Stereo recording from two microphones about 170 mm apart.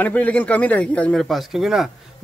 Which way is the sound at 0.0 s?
10° left (ahead or behind).